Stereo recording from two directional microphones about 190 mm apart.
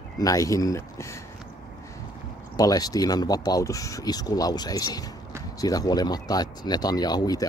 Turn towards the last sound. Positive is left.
turn(degrees=20)  # may be behind; listen again after turning